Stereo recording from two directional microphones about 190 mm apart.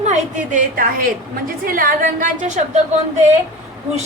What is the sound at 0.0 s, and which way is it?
A woman's voice, 40° right (ahead or behind).